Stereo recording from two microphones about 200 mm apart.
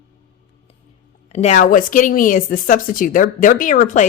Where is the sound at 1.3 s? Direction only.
35° left (ahead or behind).